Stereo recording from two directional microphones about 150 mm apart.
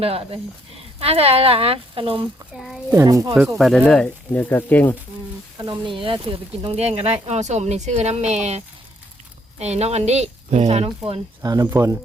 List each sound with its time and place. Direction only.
0.0 s speech: 40° right (ahead or behind)
2.6 s a child's voice: centre (ahead or behind)
2.9 s speech: 20° right (ahead or behind)
3.6 s speech: centre (ahead or behind)
5.5 s speech: 25° right (ahead or behind)
5.9 s speech: 35° right (ahead or behind)
11.4 s speech: 20° right (ahead or behind)